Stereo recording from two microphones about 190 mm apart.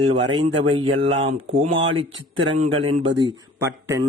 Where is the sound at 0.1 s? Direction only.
30° right (ahead or behind).